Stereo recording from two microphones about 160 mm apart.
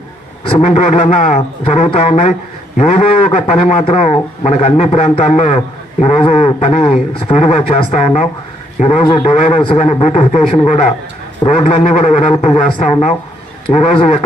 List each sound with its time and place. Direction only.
0.4 s a man's voice: 40° left (ahead or behind)